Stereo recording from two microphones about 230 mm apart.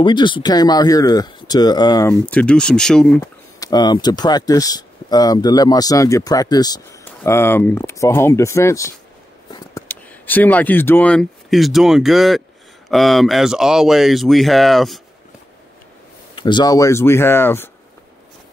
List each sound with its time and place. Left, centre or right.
0.0 s speech: centre
16.3 s speech: centre